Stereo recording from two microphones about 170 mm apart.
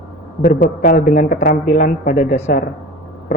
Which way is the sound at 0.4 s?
55° left (ahead or behind).